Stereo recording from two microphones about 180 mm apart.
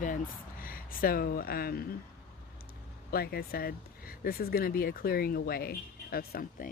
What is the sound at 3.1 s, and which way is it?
Speech, 60° left (ahead or behind).